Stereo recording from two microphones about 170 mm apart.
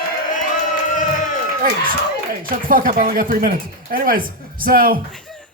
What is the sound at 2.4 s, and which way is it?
A man's voice, 55° right (ahead or behind).